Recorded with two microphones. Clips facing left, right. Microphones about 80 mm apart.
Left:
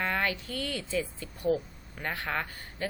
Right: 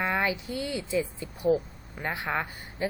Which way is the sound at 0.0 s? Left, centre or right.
Centre.